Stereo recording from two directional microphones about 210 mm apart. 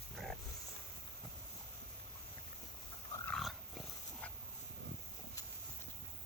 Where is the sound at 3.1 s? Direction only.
5° left (ahead or behind).